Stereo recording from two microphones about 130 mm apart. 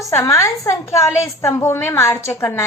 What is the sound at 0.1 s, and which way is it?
A woman's voice, 20° left (ahead or behind).